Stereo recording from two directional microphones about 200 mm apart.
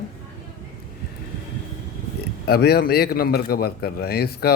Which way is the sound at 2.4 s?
50° left (ahead or behind).